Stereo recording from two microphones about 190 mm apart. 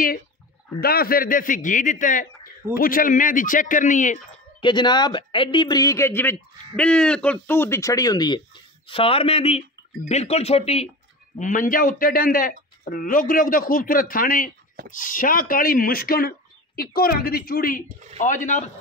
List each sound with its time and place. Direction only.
0.7 s speech: 55° left (ahead or behind)
4.6 s speech: 25° left (ahead or behind)
11.3 s speech: 45° left (ahead or behind)